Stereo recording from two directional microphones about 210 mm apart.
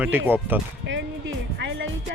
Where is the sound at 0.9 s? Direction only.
60° right (ahead or behind).